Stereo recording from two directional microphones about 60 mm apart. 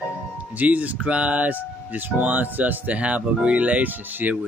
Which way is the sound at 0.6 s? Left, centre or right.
Right.